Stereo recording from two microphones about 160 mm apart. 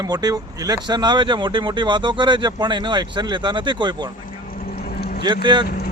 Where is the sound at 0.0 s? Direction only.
25° right (ahead or behind).